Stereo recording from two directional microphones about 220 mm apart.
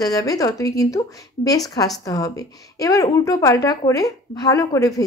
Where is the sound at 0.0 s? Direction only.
15° left (ahead or behind).